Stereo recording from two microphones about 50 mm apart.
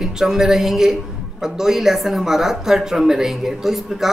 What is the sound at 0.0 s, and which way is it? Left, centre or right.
Speech, centre.